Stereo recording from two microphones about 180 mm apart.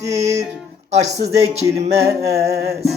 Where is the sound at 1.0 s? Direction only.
35° right (ahead or behind).